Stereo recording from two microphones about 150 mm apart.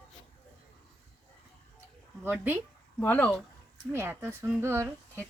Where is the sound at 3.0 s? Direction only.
10° left (ahead or behind).